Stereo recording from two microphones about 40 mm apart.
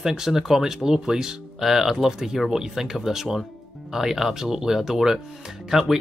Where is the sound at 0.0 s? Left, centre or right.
Centre.